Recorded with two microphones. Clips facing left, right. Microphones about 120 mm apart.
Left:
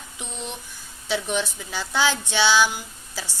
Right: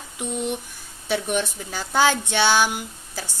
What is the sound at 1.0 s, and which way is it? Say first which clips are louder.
Speech: right 2 dB; 55° right (ahead or behind).